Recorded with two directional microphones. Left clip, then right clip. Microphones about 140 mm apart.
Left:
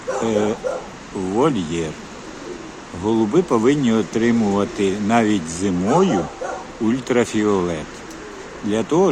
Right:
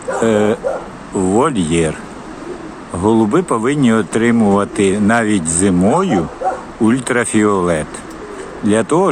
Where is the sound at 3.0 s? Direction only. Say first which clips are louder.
Right 5 dB; 20° right (ahead or behind).